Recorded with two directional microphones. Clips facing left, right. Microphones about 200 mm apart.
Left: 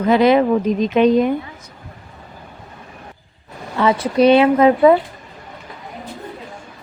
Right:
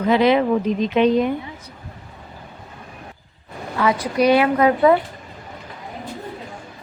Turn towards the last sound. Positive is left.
turn(degrees=20)  # may be behind; listen again after turning